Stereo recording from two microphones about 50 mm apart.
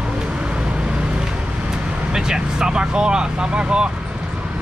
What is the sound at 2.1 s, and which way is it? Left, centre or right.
Speech, centre.